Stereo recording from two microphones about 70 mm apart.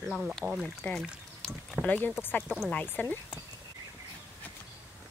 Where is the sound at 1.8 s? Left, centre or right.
Left.